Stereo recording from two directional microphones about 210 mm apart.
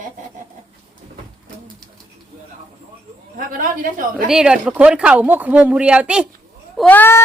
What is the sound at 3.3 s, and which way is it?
Speech, 40° right (ahead or behind).